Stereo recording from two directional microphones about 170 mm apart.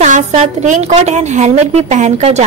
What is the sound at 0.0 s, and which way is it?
A woman's voice, 45° right (ahead or behind).